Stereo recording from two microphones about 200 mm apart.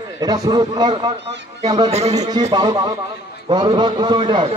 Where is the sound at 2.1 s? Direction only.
20° right (ahead or behind).